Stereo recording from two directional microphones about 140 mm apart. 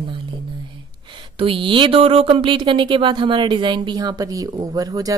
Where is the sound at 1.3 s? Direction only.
40° right (ahead or behind).